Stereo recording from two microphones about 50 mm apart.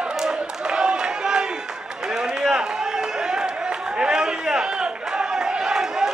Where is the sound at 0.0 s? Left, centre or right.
Centre.